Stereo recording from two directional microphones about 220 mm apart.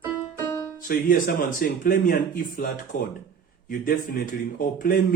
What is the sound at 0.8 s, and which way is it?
Speech, 40° left (ahead or behind).